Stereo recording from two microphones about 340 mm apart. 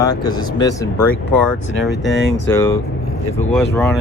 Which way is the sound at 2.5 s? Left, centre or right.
Centre.